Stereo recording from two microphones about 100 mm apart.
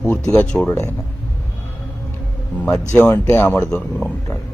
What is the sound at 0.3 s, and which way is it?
Speech, 10° left (ahead or behind).